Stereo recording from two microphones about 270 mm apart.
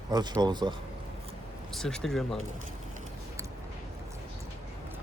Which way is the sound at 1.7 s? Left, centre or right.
Centre.